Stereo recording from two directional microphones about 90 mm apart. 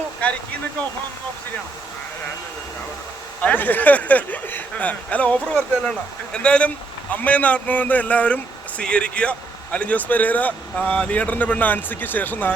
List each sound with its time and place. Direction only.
0.2 s speech: 15° left (ahead or behind)
3.4 s a man's voice: 20° left (ahead or behind)